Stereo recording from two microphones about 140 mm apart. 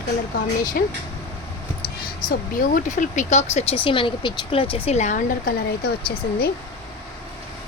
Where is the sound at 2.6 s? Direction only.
70° left (ahead or behind); by 4.9 s 40° left (ahead or behind).